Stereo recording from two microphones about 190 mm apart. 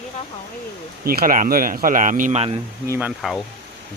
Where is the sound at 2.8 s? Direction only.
15° right (ahead or behind).